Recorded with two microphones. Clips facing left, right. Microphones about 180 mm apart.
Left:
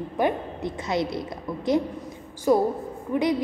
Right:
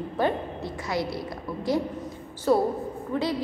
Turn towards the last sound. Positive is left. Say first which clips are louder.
# left 3 dB
turn(degrees=15)  # may be behind; listen again after turning